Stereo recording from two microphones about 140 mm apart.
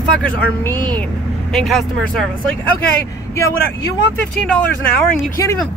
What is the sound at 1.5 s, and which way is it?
Speech, centre (ahead or behind).